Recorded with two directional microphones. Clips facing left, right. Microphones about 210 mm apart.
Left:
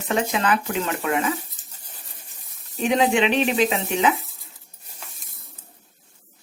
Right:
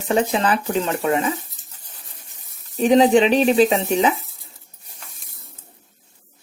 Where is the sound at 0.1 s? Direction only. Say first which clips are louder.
Right 3 dB; 35° right (ahead or behind).